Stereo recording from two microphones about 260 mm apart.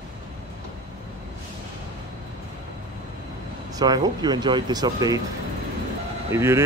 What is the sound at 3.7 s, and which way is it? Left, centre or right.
Speech, centre.